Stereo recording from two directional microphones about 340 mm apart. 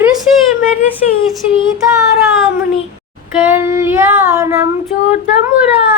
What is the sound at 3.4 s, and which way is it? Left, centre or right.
Female singing, centre.